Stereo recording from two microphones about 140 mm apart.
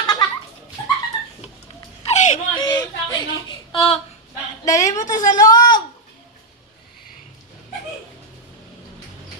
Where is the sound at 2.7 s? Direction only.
30° left (ahead or behind).